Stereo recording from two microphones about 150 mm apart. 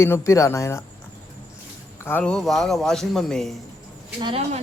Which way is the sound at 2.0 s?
10° left (ahead or behind).